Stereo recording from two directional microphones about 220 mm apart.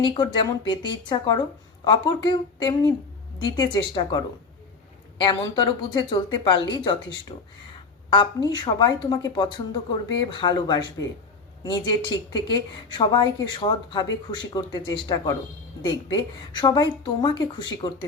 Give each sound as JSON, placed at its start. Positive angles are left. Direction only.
{"t": 0.0, "sound": "a woman's voice", "side_deg": 20}